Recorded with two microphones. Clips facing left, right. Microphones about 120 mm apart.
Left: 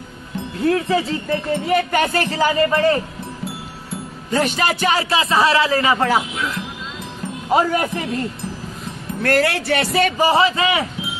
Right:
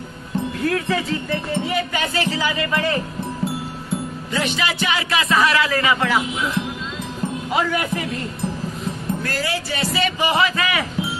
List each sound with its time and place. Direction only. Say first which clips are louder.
0.6 s speech: left 6 dB; 25° left (ahead or behind)
1.7 s speech: left 6 dB; 50° left (ahead or behind)
4.3 s speech: left 5 dB; 45° left (ahead or behind)
5.1 s speech: even; 30° left (ahead or behind)
7.4 s speech: left 6 dB; 40° left (ahead or behind)
9.2 s speech: left 7 dB; 65° left (ahead or behind)
10.2 s speech: left 3 dB; 30° left (ahead or behind)